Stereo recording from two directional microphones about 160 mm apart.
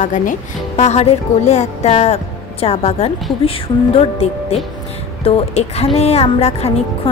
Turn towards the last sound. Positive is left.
turn(degrees=40)  # may be behind; listen again after turning